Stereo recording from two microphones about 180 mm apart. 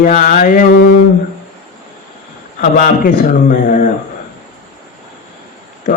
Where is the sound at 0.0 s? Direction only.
45° left (ahead or behind).